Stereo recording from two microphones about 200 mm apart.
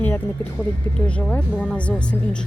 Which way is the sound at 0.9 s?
5° left (ahead or behind).